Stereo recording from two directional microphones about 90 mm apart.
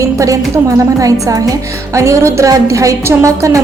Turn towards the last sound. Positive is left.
turn(degrees=-35)  # may be behind; listen again after turning